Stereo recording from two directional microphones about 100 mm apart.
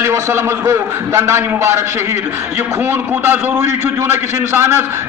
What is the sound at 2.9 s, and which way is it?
A man's voice, 25° right (ahead or behind).